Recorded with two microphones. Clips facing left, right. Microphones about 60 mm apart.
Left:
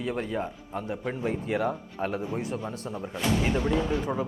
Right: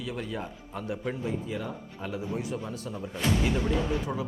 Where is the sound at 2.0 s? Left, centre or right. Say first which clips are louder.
Left 3 dB; left.